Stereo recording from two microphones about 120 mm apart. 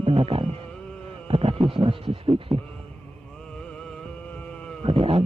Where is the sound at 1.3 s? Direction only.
50° right (ahead or behind).